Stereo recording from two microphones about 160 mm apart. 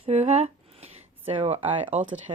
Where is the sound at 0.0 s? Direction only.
45° right (ahead or behind).